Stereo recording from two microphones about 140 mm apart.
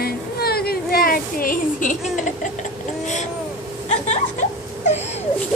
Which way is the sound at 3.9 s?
55° left (ahead or behind).